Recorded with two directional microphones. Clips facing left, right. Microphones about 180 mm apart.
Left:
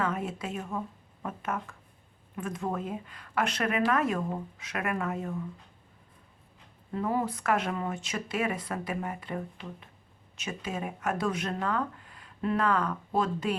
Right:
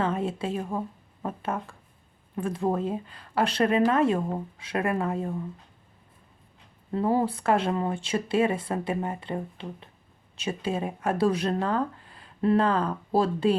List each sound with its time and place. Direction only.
0.0 s speech: 30° right (ahead or behind)
6.9 s speech: 30° right (ahead or behind)